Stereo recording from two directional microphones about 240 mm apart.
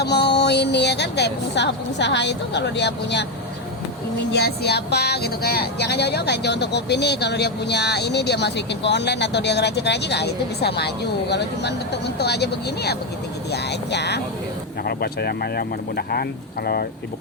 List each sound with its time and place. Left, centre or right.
0.0 s speech: left
4.3 s speech: left